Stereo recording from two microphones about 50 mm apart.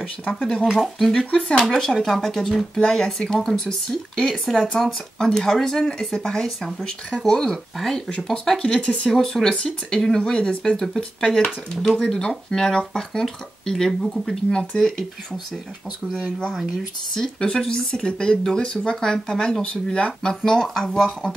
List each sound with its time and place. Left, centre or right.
0.0 s speech: centre
0.7 s speech: centre
7.2 s speech: centre
8.7 s speech: left
9.1 s speech: centre
14.5 s speech: left
17.1 s speech: centre